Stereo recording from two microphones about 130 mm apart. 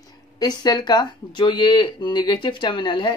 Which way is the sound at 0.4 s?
30° left (ahead or behind).